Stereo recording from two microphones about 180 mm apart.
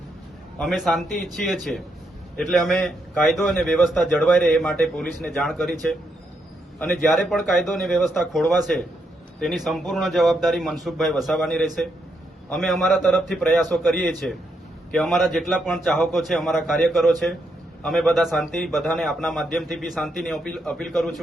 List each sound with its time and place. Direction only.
0.6 s a man's voice: centre (ahead or behind)